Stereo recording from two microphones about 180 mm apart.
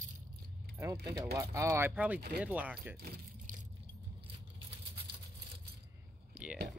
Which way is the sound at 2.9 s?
60° right (ahead or behind).